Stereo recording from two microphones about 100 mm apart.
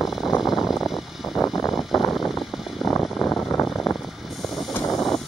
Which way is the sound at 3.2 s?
15° left (ahead or behind).